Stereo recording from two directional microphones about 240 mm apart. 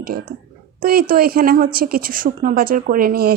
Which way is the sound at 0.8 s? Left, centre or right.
Right.